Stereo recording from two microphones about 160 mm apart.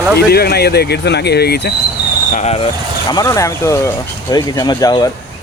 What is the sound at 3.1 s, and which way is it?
Speech, 20° left (ahead or behind).